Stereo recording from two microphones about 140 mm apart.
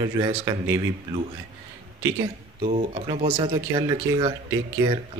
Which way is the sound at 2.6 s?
45° right (ahead or behind).